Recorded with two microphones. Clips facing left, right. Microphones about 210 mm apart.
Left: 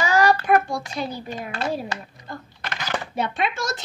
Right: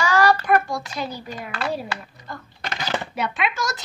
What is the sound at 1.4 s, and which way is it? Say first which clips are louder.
Speech: even; 45° left (ahead or behind).